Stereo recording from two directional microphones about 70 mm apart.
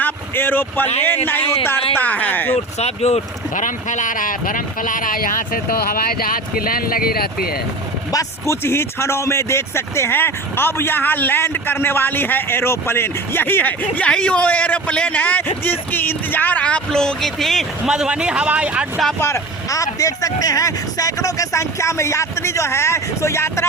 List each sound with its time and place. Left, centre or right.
0.0 s speech: left
8.1 s speech: left
8.6 s speech: left; by 17.7 s centre
17.8 s speech: centre
19.2 s speech: left